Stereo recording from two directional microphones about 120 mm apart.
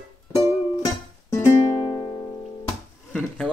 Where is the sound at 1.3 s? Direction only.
25° left (ahead or behind).